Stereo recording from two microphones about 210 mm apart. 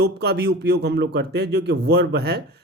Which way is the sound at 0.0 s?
50° right (ahead or behind).